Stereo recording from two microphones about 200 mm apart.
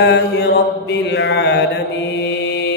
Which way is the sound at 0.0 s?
55° left (ahead or behind).